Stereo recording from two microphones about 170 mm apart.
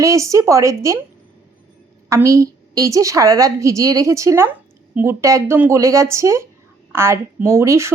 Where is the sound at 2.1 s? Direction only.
20° right (ahead or behind).